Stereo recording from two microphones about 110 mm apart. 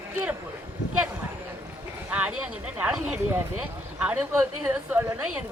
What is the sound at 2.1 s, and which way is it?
Speech, 15° right (ahead or behind).